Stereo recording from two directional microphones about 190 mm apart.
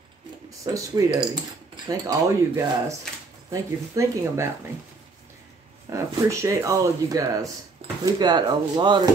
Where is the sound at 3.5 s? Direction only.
15° right (ahead or behind).